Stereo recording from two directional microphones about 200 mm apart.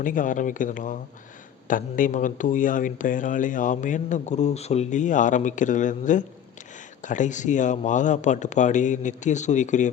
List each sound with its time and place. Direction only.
0.0 s speech: 40° left (ahead or behind)